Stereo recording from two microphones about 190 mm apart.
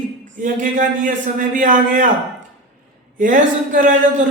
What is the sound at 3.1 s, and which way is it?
A man's voice, 45° right (ahead or behind).